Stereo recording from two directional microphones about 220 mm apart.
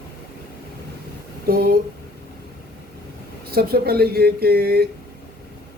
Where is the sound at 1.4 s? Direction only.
45° right (ahead or behind).